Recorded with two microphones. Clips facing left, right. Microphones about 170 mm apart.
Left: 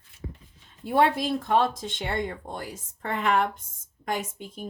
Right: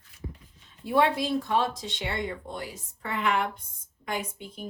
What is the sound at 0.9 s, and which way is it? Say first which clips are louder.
A woman's voice: left 1 dB; 50° left (ahead or behind).